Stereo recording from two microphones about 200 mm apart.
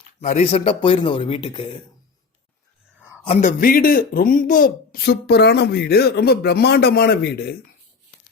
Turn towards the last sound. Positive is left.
turn(degrees=55)  # may be behind; listen again after turning